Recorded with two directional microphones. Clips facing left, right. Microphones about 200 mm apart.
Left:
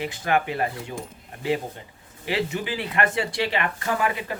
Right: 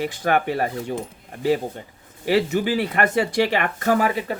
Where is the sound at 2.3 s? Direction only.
40° right (ahead or behind).